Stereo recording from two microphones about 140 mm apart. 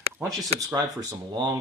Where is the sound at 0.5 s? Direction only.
25° right (ahead or behind).